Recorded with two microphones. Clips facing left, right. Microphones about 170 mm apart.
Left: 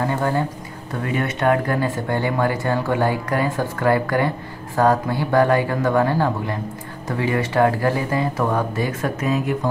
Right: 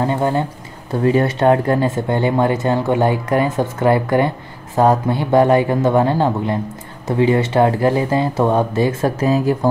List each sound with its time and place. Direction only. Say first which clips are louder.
0.0 s speech: right 3 dB; 20° right (ahead or behind)
1.0 s speech: right 6 dB; 30° right (ahead or behind)